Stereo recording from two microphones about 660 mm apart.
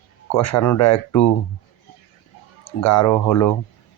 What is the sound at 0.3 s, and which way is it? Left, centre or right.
Speech, left.